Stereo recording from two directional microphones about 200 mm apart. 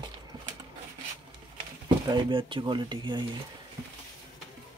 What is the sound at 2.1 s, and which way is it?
Speech, 25° right (ahead or behind).